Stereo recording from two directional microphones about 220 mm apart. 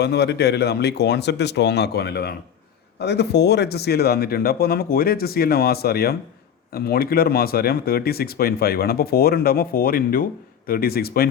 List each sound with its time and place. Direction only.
0.0 s speech: 45° left (ahead or behind)